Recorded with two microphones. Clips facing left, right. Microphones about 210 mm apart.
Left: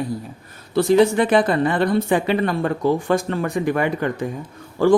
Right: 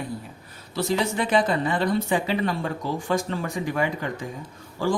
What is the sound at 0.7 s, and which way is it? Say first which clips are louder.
Speech: left 10 dB; 55° left (ahead or behind).